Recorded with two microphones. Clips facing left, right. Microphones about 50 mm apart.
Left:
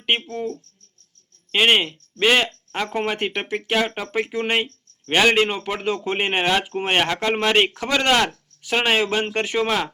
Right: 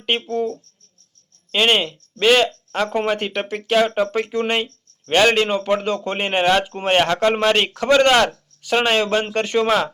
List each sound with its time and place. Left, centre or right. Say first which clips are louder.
0.0 s speech: right 2 dB; centre
1.5 s speech: even; centre
7.5 s speech: right 3 dB; centre